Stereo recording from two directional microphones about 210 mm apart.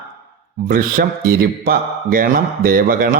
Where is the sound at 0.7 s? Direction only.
45° right (ahead or behind).